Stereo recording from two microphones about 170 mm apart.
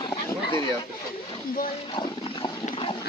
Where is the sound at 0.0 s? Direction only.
25° left (ahead or behind).